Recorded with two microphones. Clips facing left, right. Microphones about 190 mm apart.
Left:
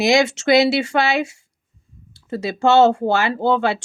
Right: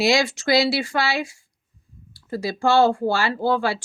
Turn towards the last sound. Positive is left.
turn(degrees=20)  # may be behind; listen again after turning